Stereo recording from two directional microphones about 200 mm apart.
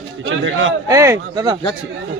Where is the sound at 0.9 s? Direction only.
15° right (ahead or behind).